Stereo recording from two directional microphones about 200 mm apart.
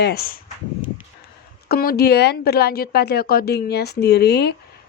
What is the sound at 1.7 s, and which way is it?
A woman's voice, 50° left (ahead or behind).